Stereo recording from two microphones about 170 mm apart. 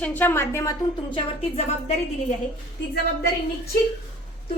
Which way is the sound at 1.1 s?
35° left (ahead or behind).